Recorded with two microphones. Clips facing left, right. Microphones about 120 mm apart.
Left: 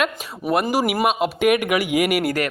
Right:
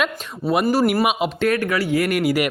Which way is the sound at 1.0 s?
5° right (ahead or behind).